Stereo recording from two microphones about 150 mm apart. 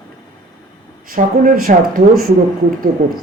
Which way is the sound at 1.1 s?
65° right (ahead or behind).